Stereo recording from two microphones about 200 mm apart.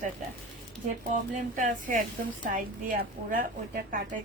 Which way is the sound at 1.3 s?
40° right (ahead or behind).